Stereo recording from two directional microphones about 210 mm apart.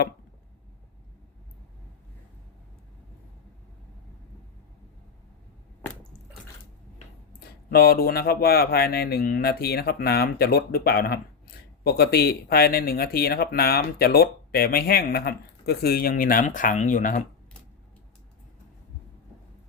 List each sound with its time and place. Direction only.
7.3 s speech: 45° left (ahead or behind)